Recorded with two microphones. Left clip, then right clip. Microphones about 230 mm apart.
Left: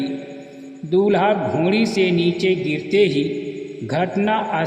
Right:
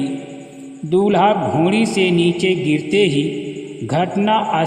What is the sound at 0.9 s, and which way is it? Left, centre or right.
A man's voice, right.